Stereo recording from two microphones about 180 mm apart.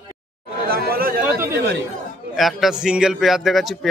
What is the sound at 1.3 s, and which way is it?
Speech, 15° right (ahead or behind).